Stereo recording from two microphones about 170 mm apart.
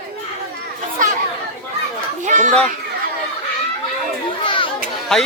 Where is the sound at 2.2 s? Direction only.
45° right (ahead or behind).